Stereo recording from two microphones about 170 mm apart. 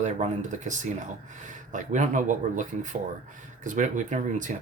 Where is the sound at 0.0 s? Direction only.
45° right (ahead or behind).